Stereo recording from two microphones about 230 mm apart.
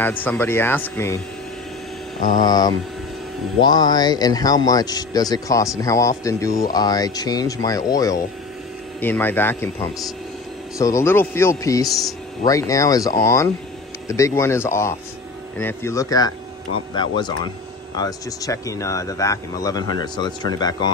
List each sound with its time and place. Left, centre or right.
0.0 s speech: centre
2.4 s speech: centre